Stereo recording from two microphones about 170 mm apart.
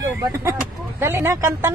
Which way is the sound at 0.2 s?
15° right (ahead or behind).